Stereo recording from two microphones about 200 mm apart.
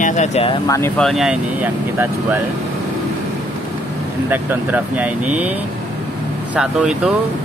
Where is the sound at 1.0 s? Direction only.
Centre (ahead or behind).